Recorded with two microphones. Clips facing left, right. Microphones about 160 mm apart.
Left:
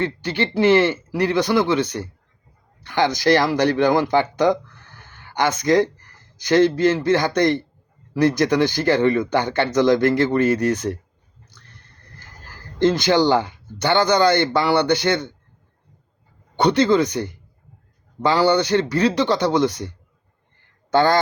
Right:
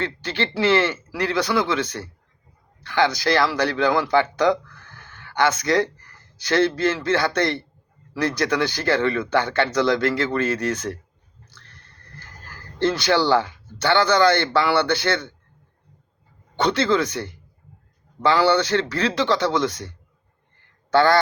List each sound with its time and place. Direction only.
0.0 s speech: 15° left (ahead or behind)
1.5 s speech: 40° left (ahead or behind)
1.7 s speech: 15° left (ahead or behind)
4.1 s a sound: 15° left (ahead or behind)
5.5 s speech: 15° left (ahead or behind)
12.8 s speech: 15° left (ahead or behind)
16.6 s speech: 15° left (ahead or behind)
18.4 s speech: 15° left (ahead or behind)
20.9 s speech: 15° left (ahead or behind)